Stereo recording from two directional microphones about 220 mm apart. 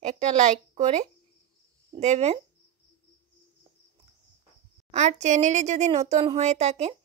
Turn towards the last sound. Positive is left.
turn(degrees=-30)  # may be behind; listen again after turning